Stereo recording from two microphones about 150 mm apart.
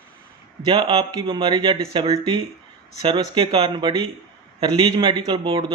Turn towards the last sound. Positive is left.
turn(degrees=-30)  # may be behind; listen again after turning